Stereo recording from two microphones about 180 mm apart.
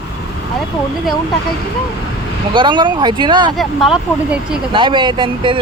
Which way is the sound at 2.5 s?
25° right (ahead or behind).